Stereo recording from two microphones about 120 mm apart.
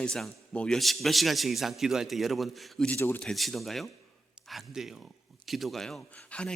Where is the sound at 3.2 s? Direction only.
5° left (ahead or behind).